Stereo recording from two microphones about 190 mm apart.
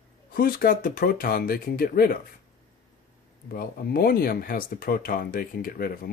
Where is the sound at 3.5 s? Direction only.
50° left (ahead or behind).